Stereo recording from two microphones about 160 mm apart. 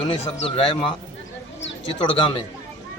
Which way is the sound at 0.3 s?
35° left (ahead or behind).